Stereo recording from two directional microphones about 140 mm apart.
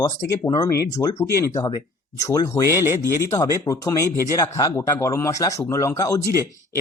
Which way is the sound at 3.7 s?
25° left (ahead or behind).